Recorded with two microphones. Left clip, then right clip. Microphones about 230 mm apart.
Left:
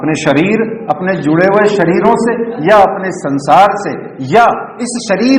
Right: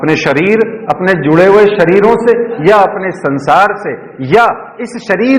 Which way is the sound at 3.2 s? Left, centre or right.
Right.